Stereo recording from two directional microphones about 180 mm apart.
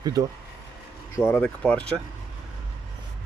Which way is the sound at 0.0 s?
20° right (ahead or behind).